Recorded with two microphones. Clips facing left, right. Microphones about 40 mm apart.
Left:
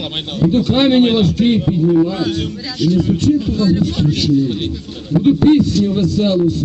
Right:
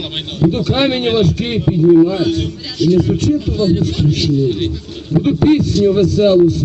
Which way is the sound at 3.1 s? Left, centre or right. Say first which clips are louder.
Even; centre.